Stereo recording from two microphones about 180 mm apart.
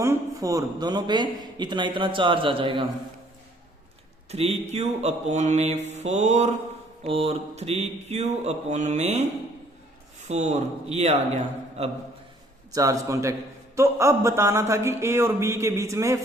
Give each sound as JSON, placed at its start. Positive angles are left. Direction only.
{"t": 0.0, "sound": "a man's voice", "side_deg": -15}
{"t": 4.3, "sound": "mantra", "side_deg": -35}
{"t": 10.2, "sound": "mantra", "side_deg": -40}
{"t": 12.7, "sound": "speech", "side_deg": -20}